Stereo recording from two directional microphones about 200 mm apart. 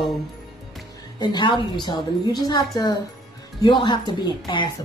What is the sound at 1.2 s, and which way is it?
A woman's voice, 25° left (ahead or behind).